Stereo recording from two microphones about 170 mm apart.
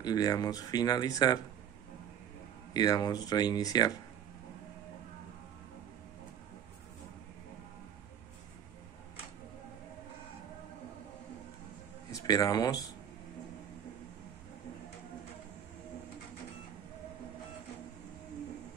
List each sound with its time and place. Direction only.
0.0 s speech: 20° left (ahead or behind)
2.7 s speech: 25° left (ahead or behind)
12.1 s speech: 20° left (ahead or behind)